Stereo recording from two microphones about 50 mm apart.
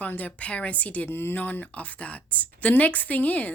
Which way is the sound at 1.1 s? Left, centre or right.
Left.